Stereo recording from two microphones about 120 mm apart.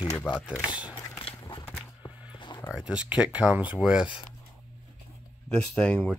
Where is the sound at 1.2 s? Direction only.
45° left (ahead or behind).